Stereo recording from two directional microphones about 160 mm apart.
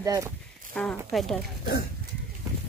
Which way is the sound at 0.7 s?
5° left (ahead or behind).